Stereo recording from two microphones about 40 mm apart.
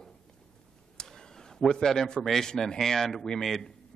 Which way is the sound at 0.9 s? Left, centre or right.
Centre.